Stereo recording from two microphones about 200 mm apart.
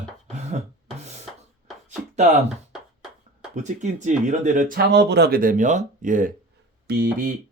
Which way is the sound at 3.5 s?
35° right (ahead or behind).